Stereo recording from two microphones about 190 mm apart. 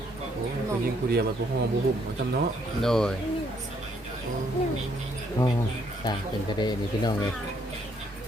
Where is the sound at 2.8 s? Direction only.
5° left (ahead or behind).